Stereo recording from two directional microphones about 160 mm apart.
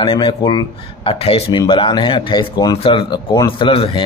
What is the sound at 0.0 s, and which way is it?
A man's voice, 30° left (ahead or behind).